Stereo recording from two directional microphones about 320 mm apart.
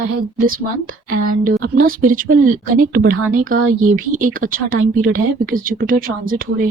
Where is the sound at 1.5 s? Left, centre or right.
Right.